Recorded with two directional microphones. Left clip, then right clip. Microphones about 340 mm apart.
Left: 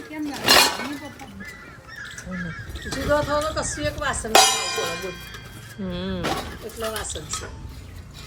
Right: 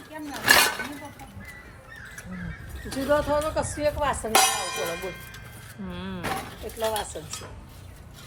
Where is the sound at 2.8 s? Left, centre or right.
Centre.